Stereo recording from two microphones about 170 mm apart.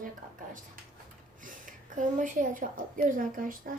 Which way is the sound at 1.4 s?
50° right (ahead or behind).